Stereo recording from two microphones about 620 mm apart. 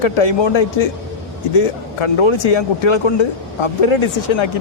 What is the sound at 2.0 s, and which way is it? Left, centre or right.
Speech, left.